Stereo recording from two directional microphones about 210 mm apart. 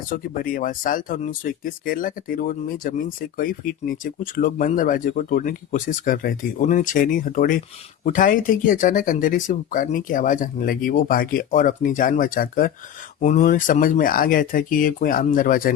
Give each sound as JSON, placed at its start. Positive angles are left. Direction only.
{"t": 0.1, "sound": "speech", "side_deg": 40}